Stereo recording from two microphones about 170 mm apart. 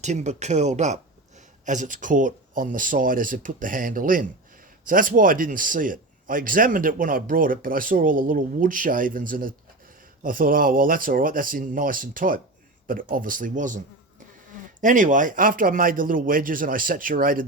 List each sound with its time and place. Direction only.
0.0 s a man's voice: 45° right (ahead or behind)